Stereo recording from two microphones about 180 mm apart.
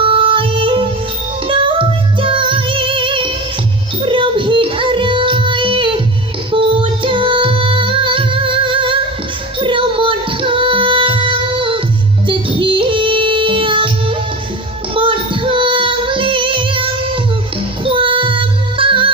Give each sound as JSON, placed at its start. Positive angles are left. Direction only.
{"t": 0.0, "sound": "music", "side_deg": -30}